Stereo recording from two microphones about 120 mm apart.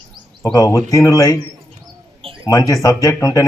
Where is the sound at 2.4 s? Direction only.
30° left (ahead or behind).